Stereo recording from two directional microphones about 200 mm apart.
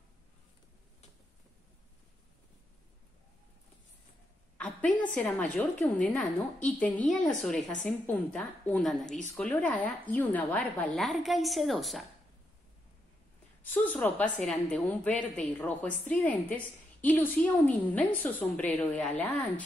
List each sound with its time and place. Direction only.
4.6 s a woman's voice: 5° left (ahead or behind)
9.0 s speech: 35° left (ahead or behind)
9.4 s a woman's voice: 5° left (ahead or behind)
13.6 s a woman's voice: 10° left (ahead or behind)